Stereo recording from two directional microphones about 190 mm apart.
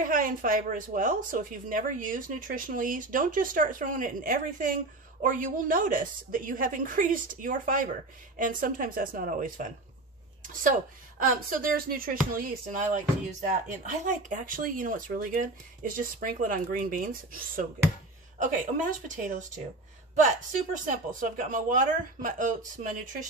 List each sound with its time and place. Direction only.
0.0 s a woman's voice: 45° right (ahead or behind)
20.8 s a woman's voice: 40° right (ahead or behind)